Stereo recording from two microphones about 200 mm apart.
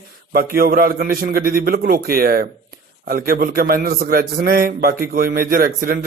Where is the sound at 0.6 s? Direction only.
45° right (ahead or behind).